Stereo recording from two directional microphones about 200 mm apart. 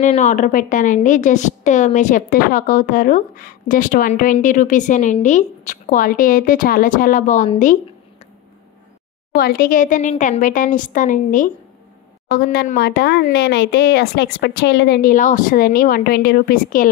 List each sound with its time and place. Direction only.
0.0 s a woman's voice: 35° left (ahead or behind)
9.3 s a woman's voice: 50° left (ahead or behind)
12.5 s a woman's voice: 50° left (ahead or behind)